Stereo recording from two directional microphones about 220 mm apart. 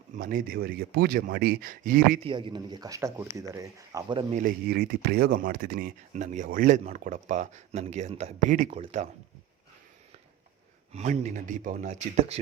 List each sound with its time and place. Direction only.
0.2 s speech: 40° right (ahead or behind)
2.2 s speech: 20° right (ahead or behind)
4.4 s speech: 40° right (ahead or behind)
10.9 s speech: 30° right (ahead or behind)